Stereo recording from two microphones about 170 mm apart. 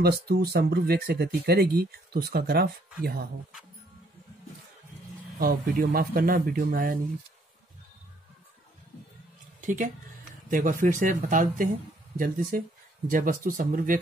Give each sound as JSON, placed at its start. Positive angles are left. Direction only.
{"t": 0.0, "sound": "speech", "side_deg": -65}
{"t": 5.4, "sound": "speech", "side_deg": -55}
{"t": 9.6, "sound": "music", "side_deg": -45}
{"t": 10.5, "sound": "speech", "side_deg": -50}